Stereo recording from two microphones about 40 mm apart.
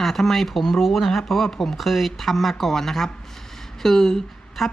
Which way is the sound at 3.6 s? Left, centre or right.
Centre.